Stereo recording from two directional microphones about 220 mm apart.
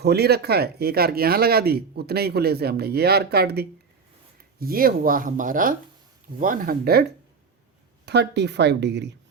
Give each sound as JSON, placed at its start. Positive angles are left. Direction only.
{"t": 0.0, "sound": "speech", "side_deg": -45}